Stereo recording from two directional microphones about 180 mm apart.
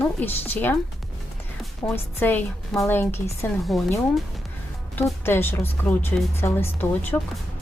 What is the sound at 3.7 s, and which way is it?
Speech, centre (ahead or behind).